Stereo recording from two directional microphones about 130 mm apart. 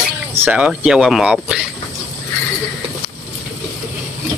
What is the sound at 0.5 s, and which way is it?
Speech, 10° right (ahead or behind).